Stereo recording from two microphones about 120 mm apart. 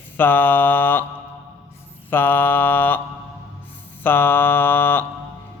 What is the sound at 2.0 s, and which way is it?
Speech, 15° left (ahead or behind).